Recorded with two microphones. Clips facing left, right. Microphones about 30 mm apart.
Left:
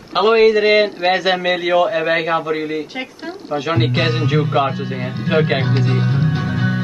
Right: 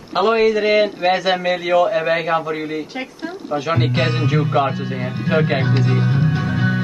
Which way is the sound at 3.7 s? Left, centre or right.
Centre.